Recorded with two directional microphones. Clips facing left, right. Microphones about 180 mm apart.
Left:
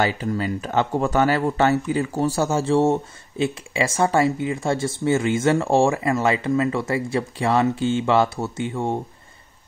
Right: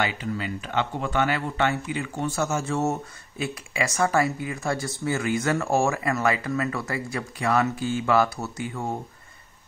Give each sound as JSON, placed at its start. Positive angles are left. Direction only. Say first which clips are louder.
{"t": 0.0, "sound": "speech", "louder": "left 5 dB", "side_deg": 40}